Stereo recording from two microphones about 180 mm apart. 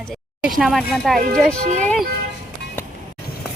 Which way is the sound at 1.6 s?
40° right (ahead or behind).